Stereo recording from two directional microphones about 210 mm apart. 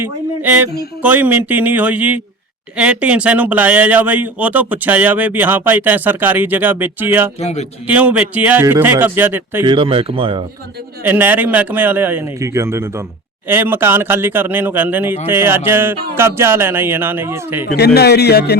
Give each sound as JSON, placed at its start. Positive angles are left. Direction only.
{"t": 0.0, "sound": "speech", "side_deg": -10}
{"t": 7.3, "sound": "speech", "side_deg": 30}
{"t": 7.9, "sound": "speech", "side_deg": -5}
{"t": 9.6, "sound": "speech", "side_deg": -25}
{"t": 11.0, "sound": "speech", "side_deg": -10}
{"t": 17.7, "sound": "speech", "side_deg": 50}